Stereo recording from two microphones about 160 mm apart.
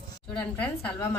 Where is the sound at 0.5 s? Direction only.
10° left (ahead or behind).